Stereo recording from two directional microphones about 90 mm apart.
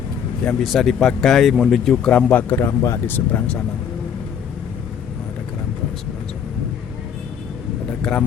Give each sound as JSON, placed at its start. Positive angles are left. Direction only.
{"t": 0.6, "sound": "speech", "side_deg": 0}
{"t": 2.3, "sound": "speech", "side_deg": 20}
{"t": 2.6, "sound": "speech", "side_deg": 35}
{"t": 3.1, "sound": "speech", "side_deg": 20}
{"t": 8.0, "sound": "a man's voice", "side_deg": 5}